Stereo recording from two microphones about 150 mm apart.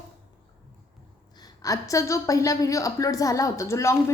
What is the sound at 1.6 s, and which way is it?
A woman's voice, 20° left (ahead or behind).